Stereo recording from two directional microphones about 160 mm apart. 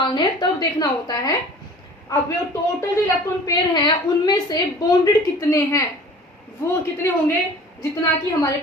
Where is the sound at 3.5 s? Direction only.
30° left (ahead or behind).